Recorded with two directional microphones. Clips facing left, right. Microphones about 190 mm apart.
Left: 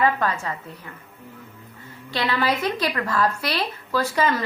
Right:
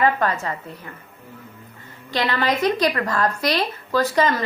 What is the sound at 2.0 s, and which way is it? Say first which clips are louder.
A woman's voice: right 1 dB; 10° left (ahead or behind).